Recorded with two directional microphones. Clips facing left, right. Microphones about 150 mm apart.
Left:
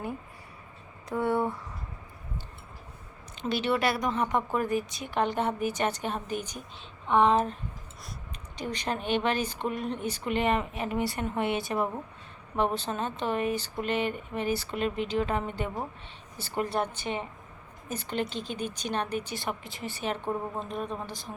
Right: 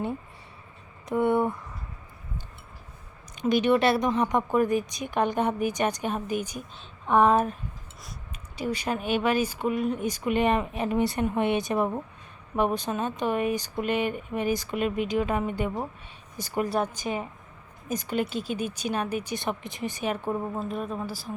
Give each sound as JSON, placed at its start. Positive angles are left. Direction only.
{"t": 1.0, "sound": "speech", "side_deg": -20}
{"t": 3.3, "sound": "speech", "side_deg": -15}
{"t": 8.5, "sound": "speech", "side_deg": -10}